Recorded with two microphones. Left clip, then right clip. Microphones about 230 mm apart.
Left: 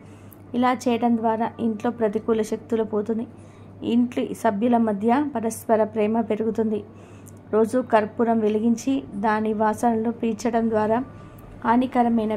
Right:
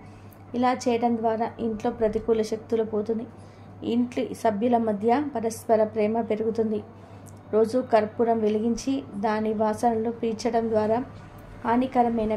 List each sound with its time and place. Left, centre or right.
0.5 s a woman's voice: centre